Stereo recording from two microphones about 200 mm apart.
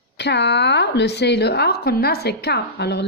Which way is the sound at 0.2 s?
60° left (ahead or behind).